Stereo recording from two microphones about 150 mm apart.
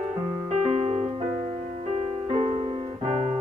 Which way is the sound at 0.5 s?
45° right (ahead or behind).